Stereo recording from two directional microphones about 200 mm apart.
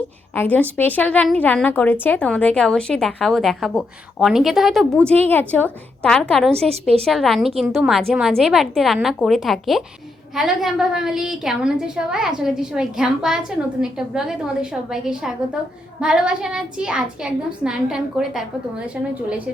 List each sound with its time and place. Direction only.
0.3 s a woman's voice: 10° left (ahead or behind)
6.7 s a woman's voice: 30° right (ahead or behind)
7.0 s speech: centre (ahead or behind)